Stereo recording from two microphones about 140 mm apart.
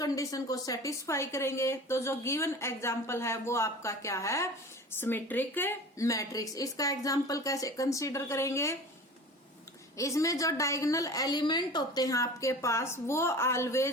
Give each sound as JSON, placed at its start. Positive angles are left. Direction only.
{"t": 0.0, "sound": "a woman's voice", "side_deg": 25}
{"t": 10.0, "sound": "a woman's voice", "side_deg": 25}